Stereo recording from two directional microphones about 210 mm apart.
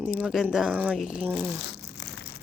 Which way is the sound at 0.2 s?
Centre (ahead or behind).